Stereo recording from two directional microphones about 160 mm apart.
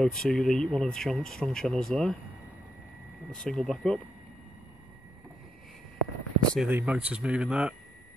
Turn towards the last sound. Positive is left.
turn(degrees=-5)  # may be behind; listen again after turning